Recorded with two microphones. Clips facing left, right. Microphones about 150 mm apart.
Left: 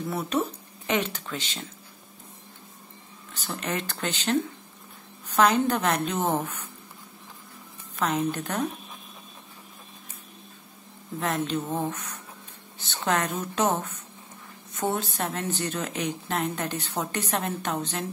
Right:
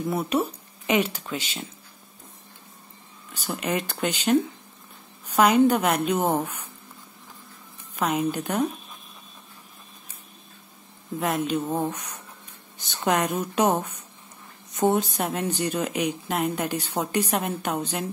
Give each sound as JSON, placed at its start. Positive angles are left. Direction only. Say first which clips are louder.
{"t": 0.1, "sound": "speech", "louder": "right 2 dB", "side_deg": -10}
{"t": 3.3, "sound": "speech", "louder": "right 4 dB", "side_deg": -10}
{"t": 7.9, "sound": "speech", "louder": "right 2 dB", "side_deg": -10}
{"t": 11.1, "sound": "speech", "louder": "right 3 dB", "side_deg": -10}